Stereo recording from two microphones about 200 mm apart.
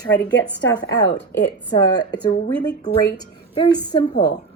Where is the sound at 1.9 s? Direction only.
20° left (ahead or behind).